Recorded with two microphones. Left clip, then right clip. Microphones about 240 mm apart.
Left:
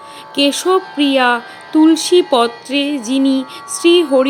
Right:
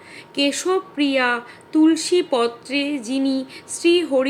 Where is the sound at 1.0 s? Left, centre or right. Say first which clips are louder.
Left 6 dB; left.